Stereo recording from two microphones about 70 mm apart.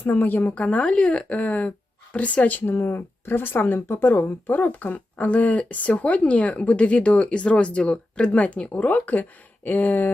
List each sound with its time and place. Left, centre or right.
0.0 s speech: left